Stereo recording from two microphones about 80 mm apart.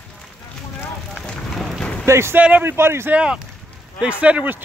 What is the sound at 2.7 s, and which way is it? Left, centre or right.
Speech, right.